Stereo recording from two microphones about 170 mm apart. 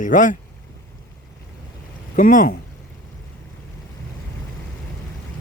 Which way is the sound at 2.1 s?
55° left (ahead or behind).